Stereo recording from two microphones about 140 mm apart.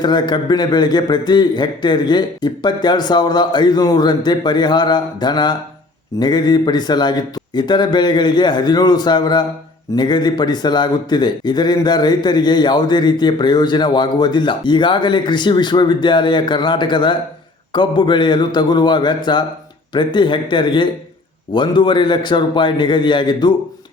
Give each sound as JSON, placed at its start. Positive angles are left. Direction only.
{"t": 0.0, "sound": "a man's voice", "side_deg": 30}